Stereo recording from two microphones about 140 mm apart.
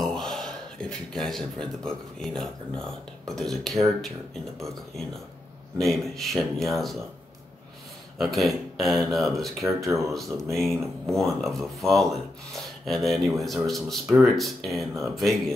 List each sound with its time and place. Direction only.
0.0 s speech: centre (ahead or behind)
8.2 s speech: centre (ahead or behind)